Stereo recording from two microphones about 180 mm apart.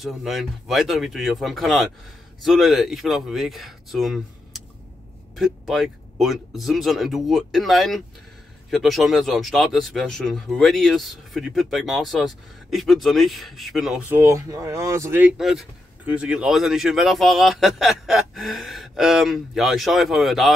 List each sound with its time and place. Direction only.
0.0 s speech: centre (ahead or behind)
5.3 s speech: centre (ahead or behind)